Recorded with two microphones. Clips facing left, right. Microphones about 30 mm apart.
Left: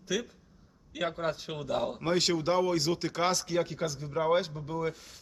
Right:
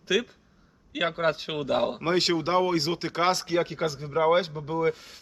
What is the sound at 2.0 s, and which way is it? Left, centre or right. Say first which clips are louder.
Speech: right 3 dB; right.